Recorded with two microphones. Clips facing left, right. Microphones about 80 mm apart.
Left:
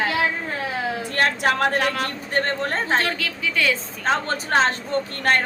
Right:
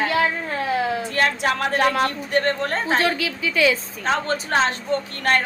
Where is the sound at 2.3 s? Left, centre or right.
Left.